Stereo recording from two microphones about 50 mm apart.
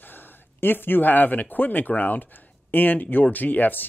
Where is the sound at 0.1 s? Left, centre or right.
Left.